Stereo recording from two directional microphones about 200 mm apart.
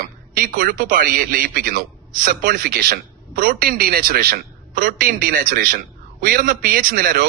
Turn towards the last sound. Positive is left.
turn(degrees=-45)  # may be behind; listen again after turning